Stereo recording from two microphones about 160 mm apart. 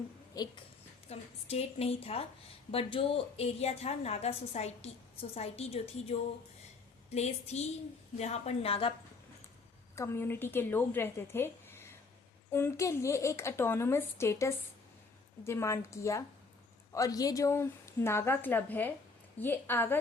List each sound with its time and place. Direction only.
0.4 s speech: 25° left (ahead or behind)
1.0 s a woman's voice: 40° left (ahead or behind)
9.9 s a woman's voice: 15° left (ahead or behind)